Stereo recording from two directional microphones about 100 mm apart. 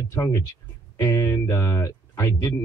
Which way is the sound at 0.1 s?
30° left (ahead or behind).